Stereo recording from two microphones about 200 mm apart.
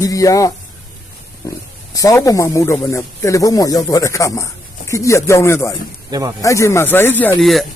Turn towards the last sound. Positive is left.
turn(degrees=0)  # may be behind; listen again after turning